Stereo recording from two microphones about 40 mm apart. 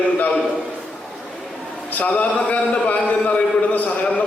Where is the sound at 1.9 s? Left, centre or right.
Left.